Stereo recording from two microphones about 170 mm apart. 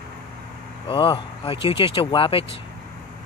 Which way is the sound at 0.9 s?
30° left (ahead or behind).